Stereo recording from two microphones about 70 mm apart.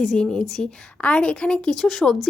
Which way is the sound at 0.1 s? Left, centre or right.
Centre.